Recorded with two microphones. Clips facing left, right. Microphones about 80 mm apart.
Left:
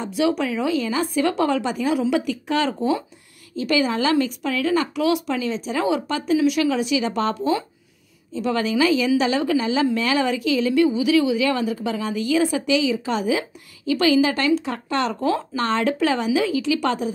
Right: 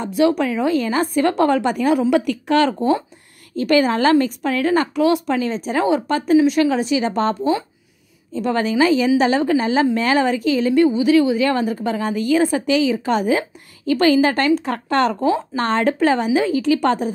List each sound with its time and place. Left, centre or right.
0.0 s a woman's voice: right
15.1 s speech: right
15.5 s a woman's voice: right